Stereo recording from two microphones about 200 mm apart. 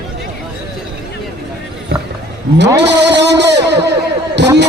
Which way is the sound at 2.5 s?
60° right (ahead or behind).